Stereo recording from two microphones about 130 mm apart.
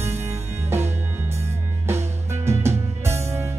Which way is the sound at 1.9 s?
20° right (ahead or behind).